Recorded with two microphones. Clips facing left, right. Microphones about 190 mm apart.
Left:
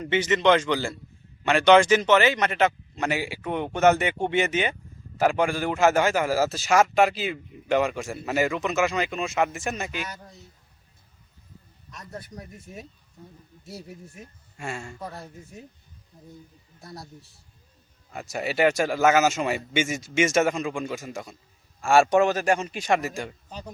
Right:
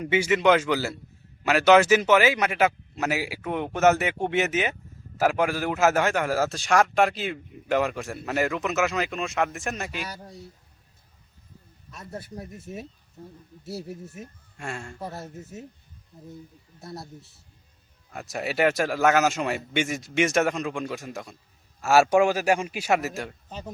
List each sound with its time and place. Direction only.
0.0 s a man's voice: 10° right (ahead or behind)
11.9 s speech: 5° right (ahead or behind)
14.2 s a man's voice: centre (ahead or behind)
16.8 s a man's voice: centre (ahead or behind)
18.1 s a man's voice: centre (ahead or behind)